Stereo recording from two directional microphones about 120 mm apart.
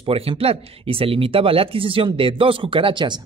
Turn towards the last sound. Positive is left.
turn(degrees=-40)  # may be behind; listen again after turning